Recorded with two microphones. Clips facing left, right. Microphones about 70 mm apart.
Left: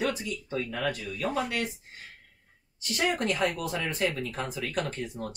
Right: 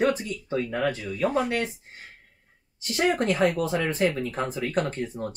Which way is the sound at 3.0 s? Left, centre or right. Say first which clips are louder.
Right 5 dB; right.